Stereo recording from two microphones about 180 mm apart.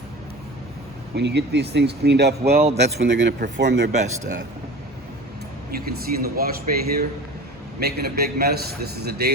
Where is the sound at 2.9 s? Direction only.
75° right (ahead or behind).